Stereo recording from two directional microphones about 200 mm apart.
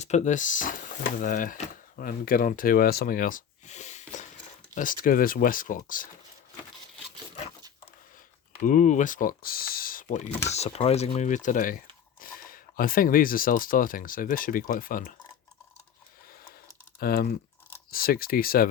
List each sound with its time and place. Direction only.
0.0 s speech: 35° left (ahead or behind)
8.6 s speech: 40° left (ahead or behind)
17.0 s speech: 50° left (ahead or behind)